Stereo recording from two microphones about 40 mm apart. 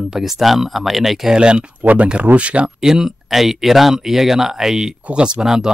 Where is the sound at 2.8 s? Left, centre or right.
Centre.